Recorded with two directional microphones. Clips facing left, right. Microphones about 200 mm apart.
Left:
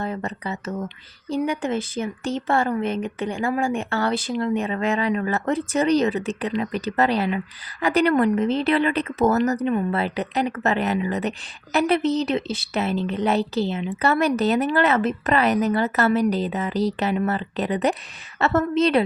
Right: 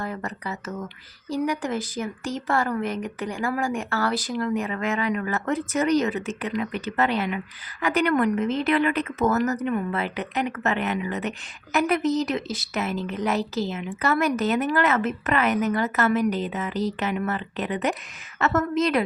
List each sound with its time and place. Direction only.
0.0 s a woman's voice: 25° left (ahead or behind)